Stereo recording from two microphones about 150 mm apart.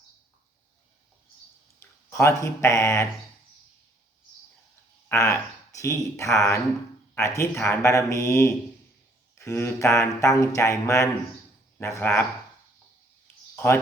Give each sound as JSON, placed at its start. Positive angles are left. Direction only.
{"t": 1.8, "sound": "a sound", "side_deg": 20}
{"t": 2.4, "sound": "speech", "side_deg": 20}
{"t": 5.0, "sound": "speech", "side_deg": 20}